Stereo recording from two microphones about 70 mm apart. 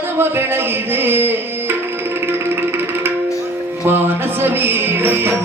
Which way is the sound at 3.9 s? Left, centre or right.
Right.